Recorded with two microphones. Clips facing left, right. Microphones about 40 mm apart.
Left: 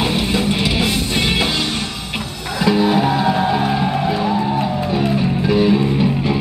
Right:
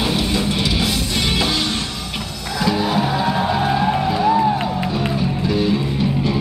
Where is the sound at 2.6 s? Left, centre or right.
Centre.